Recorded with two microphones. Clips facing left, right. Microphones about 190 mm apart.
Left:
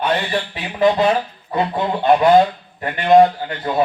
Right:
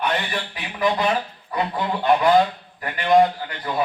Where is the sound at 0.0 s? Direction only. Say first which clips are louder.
Left 5 dB; 30° left (ahead or behind).